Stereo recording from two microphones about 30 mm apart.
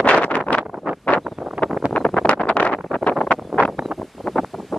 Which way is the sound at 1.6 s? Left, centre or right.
Right.